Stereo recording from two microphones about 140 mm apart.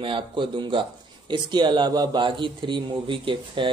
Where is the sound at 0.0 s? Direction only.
35° right (ahead or behind).